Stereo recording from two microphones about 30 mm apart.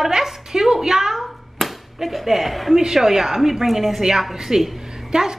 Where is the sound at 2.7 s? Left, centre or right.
Centre.